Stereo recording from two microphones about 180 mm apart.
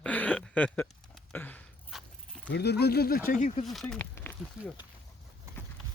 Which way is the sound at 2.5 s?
65° left (ahead or behind).